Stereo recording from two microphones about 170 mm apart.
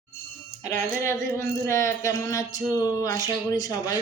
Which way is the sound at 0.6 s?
15° left (ahead or behind).